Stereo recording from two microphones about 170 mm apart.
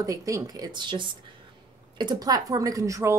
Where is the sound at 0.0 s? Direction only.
20° right (ahead or behind).